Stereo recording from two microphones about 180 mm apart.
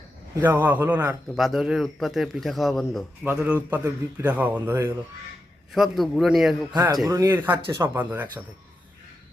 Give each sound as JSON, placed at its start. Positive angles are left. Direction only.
{"t": 0.4, "sound": "a man's voice", "side_deg": -10}
{"t": 5.7, "sound": "a man's voice", "side_deg": 0}
{"t": 6.7, "sound": "a man's voice", "side_deg": -20}